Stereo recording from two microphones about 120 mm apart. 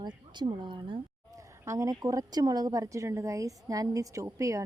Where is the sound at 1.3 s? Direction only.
25° right (ahead or behind).